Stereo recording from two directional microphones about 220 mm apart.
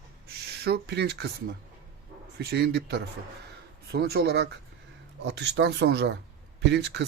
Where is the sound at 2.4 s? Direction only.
45° right (ahead or behind).